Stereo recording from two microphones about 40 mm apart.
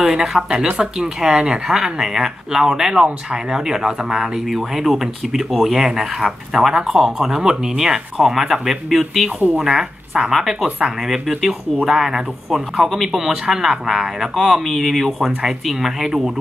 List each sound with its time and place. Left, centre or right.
0.0 s speech: centre
9.6 s a woman's voice: centre